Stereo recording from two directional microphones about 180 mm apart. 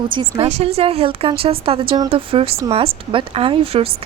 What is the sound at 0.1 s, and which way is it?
A woman's voice, 30° right (ahead or behind).